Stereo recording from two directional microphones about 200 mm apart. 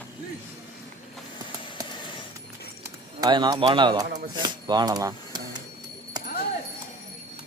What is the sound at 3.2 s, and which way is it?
Speech, 20° right (ahead or behind).